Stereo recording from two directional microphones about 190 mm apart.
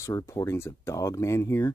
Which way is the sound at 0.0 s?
15° left (ahead or behind).